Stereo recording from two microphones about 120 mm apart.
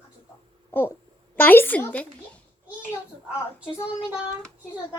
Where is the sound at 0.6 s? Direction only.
20° left (ahead or behind).